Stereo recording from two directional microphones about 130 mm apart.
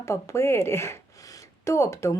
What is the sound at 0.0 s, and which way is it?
Speech, 20° left (ahead or behind).